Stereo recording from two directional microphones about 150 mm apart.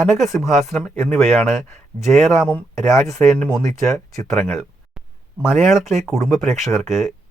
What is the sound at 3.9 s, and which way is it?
Speech, 20° left (ahead or behind).